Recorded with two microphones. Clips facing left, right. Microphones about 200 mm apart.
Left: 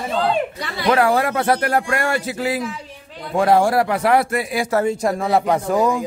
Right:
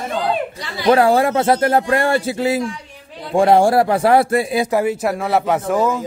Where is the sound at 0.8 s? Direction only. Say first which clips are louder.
Right 4 dB; 30° right (ahead or behind).